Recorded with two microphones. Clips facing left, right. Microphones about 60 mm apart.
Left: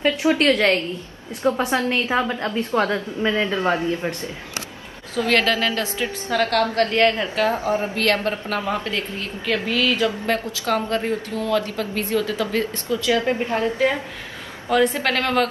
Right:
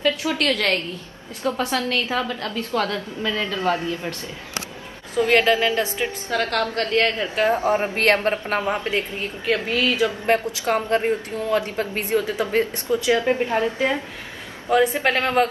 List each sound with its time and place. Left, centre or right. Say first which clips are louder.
0.0 s a woman's voice: left 4 dB; left
5.1 s a woman's voice: right 2 dB; right
15.0 s a woman's voice: right 1 dB; centre